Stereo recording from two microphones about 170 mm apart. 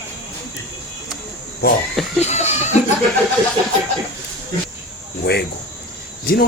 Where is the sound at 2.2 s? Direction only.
40° left (ahead or behind).